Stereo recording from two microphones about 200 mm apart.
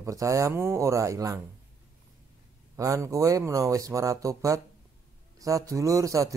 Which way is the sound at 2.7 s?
15° right (ahead or behind).